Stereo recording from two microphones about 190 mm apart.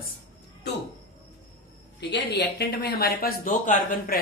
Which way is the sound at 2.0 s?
60° left (ahead or behind).